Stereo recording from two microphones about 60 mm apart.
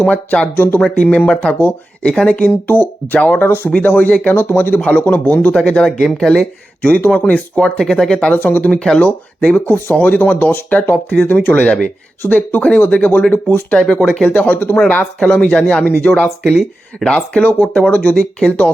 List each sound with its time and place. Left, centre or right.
0.0 s speech: left
4.8 s speech: left
5.6 s speech: centre
6.8 s speech: left
7.5 s speech: centre
8.3 s speech: left
15.2 s speech: centre